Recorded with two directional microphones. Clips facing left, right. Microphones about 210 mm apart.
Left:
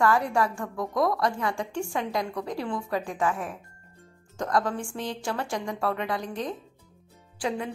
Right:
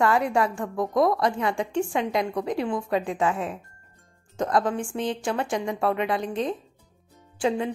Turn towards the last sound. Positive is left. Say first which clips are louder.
# right 5 dB
turn(degrees=-25)  # may be behind; listen again after turning